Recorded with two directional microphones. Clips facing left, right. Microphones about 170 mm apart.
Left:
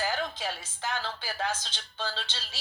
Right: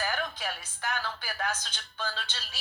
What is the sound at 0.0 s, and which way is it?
A woman's voice, 25° left (ahead or behind).